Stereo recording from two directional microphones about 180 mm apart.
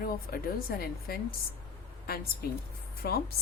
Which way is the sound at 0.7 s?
55° left (ahead or behind).